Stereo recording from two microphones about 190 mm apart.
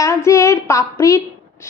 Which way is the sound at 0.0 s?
15° left (ahead or behind).